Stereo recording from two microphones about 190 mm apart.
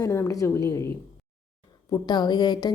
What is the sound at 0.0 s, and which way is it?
A woman's voice, 15° left (ahead or behind).